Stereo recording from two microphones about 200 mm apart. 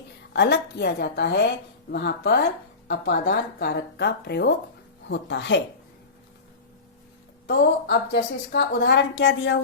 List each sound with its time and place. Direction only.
0.3 s a woman's voice: 55° left (ahead or behind)
7.4 s a woman's voice: 55° left (ahead or behind)